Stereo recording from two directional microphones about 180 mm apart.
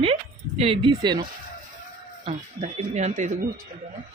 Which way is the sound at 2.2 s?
40° right (ahead or behind).